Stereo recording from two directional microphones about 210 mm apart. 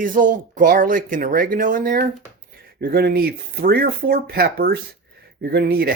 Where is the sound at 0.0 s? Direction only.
40° right (ahead or behind).